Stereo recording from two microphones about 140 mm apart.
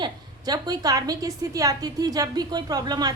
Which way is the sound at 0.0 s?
30° right (ahead or behind).